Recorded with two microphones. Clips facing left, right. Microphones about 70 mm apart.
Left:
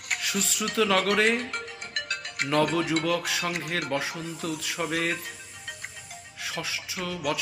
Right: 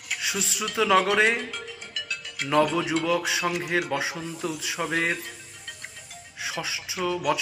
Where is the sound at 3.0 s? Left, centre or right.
Centre.